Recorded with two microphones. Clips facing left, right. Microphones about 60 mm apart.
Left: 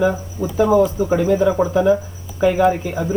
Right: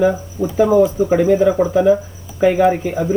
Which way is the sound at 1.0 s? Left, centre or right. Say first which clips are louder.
Right 3 dB; right.